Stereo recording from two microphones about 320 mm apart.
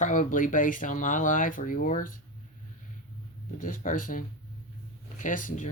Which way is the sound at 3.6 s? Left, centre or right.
Left.